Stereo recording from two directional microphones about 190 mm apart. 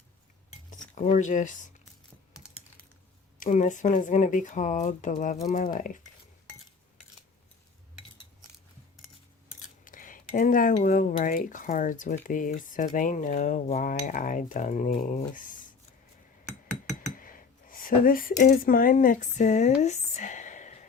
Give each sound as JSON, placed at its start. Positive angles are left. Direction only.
{"t": 0.7, "sound": "speech", "side_deg": 40}
{"t": 3.4, "sound": "speech", "side_deg": 40}
{"t": 9.6, "sound": "speech", "side_deg": 45}
{"t": 17.2, "sound": "speech", "side_deg": 45}